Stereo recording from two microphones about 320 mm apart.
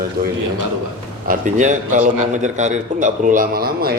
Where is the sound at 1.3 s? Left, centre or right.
Right.